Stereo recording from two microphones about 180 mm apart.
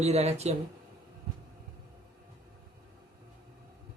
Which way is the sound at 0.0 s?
35° right (ahead or behind).